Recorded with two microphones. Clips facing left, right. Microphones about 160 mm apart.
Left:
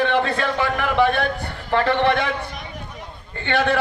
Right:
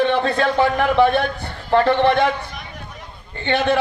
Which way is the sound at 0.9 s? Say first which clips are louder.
Right 3 dB; 35° right (ahead or behind).